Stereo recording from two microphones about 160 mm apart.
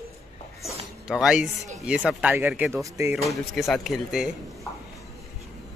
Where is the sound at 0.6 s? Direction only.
Centre (ahead or behind).